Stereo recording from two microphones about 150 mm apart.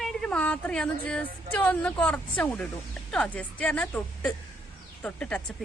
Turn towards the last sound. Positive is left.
turn(degrees=10)  # may be behind; listen again after turning